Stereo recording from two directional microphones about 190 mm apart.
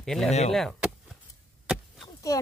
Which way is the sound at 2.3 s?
20° left (ahead or behind).